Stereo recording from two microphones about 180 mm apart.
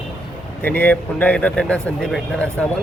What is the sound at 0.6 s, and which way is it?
Speech, 10° left (ahead or behind).